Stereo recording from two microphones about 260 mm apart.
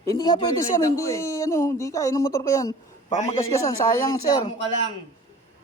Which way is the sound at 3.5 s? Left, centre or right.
Centre.